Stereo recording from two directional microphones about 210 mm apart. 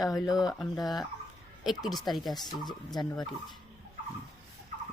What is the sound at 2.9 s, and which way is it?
Speech, 20° left (ahead or behind).